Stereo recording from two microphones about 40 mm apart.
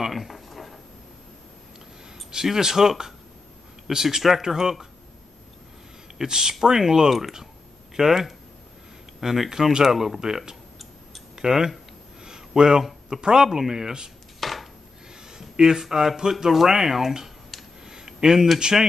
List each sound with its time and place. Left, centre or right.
0.0 s a sound: centre
2.3 s speech: centre
6.1 s speech: centre
12.3 s a sound: centre
13.1 s speech: centre
14.4 s chopping: centre
15.3 s speech: centre
17.8 s a sound: centre
18.6 s speech: centre